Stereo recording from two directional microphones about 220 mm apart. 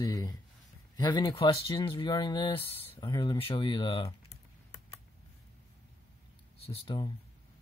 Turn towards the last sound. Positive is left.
turn(degrees=20)  # may be behind; listen again after turning